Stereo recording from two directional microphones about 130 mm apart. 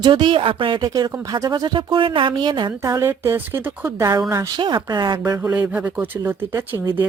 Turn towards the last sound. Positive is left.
turn(degrees=-15)  # may be behind; listen again after turning